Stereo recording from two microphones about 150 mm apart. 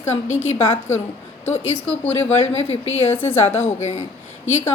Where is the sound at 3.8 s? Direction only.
50° left (ahead or behind).